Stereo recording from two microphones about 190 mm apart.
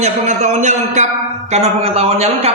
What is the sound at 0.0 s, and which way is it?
Speech, 35° right (ahead or behind).